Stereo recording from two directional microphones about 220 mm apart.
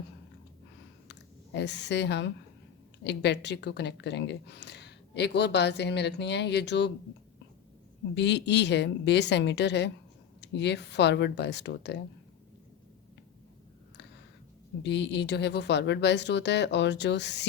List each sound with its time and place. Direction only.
1.5 s speech: 50° left (ahead or behind)
8.1 s speech: 50° left (ahead or behind)
14.8 s speech: 50° left (ahead or behind)